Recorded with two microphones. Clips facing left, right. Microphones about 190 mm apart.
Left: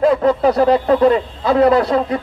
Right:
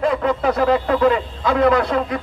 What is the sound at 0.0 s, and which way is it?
A man's voice, 35° left (ahead or behind).